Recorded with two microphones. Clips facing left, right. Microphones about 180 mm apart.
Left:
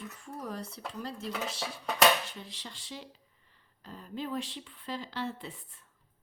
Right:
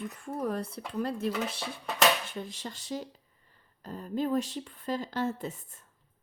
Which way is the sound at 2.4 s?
45° right (ahead or behind).